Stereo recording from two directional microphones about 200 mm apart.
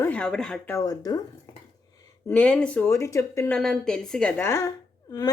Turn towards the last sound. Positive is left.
turn(degrees=20)  # may be behind; listen again after turning